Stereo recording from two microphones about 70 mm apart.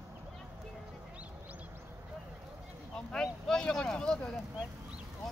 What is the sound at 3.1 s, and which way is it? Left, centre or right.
Speech, centre.